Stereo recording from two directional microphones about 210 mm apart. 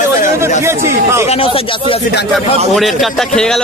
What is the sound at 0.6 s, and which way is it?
Speech, 10° right (ahead or behind).